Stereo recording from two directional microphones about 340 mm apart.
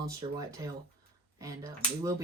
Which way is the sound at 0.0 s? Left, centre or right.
Centre.